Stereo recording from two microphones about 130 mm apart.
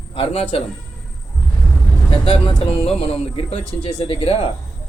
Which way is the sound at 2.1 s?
45° left (ahead or behind).